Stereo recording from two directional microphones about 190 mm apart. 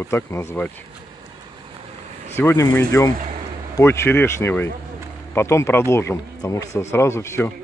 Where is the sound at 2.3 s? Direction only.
10° left (ahead or behind).